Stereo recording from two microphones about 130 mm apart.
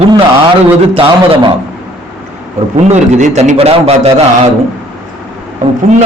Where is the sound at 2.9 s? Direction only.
65° right (ahead or behind).